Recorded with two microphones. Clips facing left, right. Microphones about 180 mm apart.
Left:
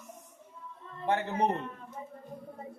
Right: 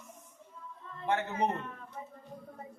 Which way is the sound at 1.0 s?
35° left (ahead or behind).